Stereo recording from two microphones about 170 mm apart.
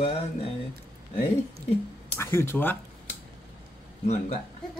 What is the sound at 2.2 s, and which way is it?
Speech, 15° left (ahead or behind).